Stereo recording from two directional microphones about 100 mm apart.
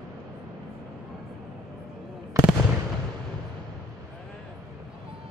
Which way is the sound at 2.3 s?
30° right (ahead or behind).